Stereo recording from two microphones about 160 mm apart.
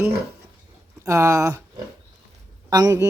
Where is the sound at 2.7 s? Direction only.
20° right (ahead or behind).